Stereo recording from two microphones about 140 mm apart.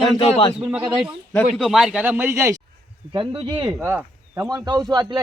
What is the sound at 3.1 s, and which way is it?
Speech, 35° right (ahead or behind).